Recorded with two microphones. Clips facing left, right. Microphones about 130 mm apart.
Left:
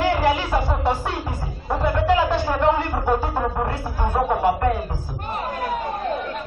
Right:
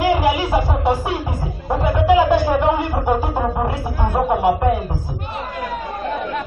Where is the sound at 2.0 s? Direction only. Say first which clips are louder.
Right 7 dB; 10° right (ahead or behind).